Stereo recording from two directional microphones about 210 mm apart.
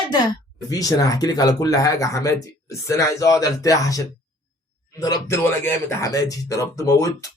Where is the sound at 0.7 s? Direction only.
15° left (ahead or behind).